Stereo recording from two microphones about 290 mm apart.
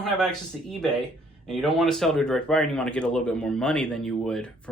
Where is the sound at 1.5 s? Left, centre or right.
Centre.